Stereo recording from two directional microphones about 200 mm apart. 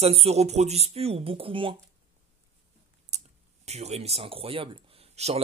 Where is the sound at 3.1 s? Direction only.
35° right (ahead or behind).